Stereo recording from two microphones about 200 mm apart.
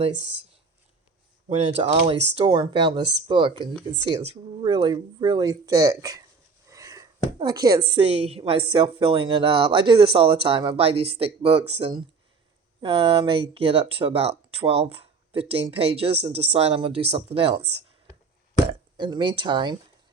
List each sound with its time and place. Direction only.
1.5 s speech: 30° right (ahead or behind)
6.7 s a sound: 15° right (ahead or behind)
8.1 s speech: 30° right (ahead or behind)
18.9 s speech: 20° right (ahead or behind)